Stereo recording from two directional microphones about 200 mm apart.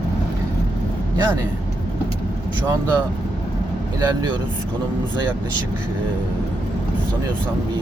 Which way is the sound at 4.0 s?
20° right (ahead or behind).